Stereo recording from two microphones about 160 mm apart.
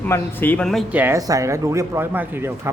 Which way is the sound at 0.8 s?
10° right (ahead or behind).